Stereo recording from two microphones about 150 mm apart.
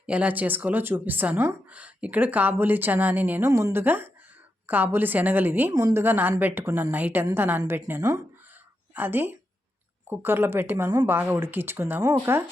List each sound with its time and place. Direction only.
0.0 s speech: 10° right (ahead or behind)